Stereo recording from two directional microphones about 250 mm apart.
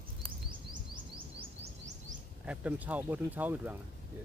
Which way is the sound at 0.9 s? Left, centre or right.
Right.